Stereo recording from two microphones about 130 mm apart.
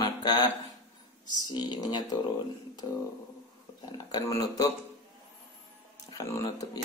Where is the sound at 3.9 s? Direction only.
25° left (ahead or behind).